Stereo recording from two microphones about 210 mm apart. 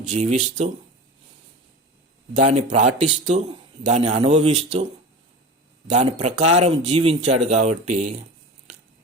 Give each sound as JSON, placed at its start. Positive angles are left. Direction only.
{"t": 0.0, "sound": "speech", "side_deg": -35}
{"t": 2.3, "sound": "speech", "side_deg": -35}
{"t": 5.9, "sound": "speech", "side_deg": -35}